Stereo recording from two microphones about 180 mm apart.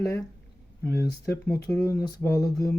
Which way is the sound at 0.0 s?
15° left (ahead or behind).